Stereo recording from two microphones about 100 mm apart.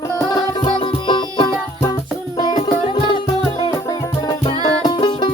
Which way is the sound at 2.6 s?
55° left (ahead or behind).